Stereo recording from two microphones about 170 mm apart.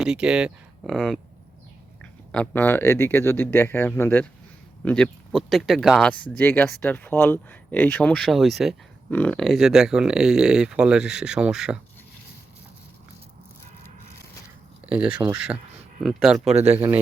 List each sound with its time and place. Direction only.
0.0 s speech: 5° right (ahead or behind)
2.3 s speech: 10° left (ahead or behind)
14.8 s speech: 5° right (ahead or behind)
16.5 s speech: 40° right (ahead or behind)
16.7 s speech: 10° right (ahead or behind)